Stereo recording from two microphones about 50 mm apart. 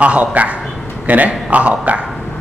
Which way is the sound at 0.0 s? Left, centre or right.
Right.